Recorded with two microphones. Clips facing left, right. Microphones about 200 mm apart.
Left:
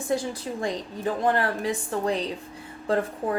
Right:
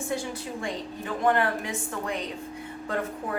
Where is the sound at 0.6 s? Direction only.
35° left (ahead or behind).